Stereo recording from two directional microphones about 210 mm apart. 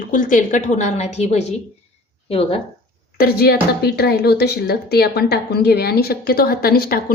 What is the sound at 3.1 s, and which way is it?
A woman's voice, 45° left (ahead or behind).